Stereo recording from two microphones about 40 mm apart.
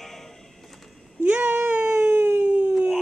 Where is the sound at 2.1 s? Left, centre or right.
Right.